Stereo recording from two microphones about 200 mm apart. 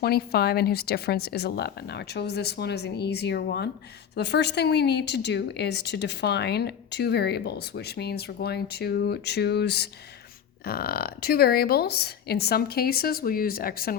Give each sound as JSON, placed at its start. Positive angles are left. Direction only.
{"t": 0.0, "sound": "a woman's voice", "side_deg": 50}